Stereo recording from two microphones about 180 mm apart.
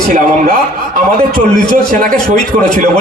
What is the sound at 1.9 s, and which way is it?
Speech, 45° right (ahead or behind).